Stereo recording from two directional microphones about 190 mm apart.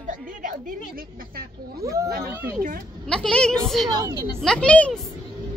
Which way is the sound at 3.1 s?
5° left (ahead or behind).